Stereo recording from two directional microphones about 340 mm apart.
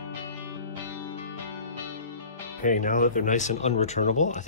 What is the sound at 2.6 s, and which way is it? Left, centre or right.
Speech, left.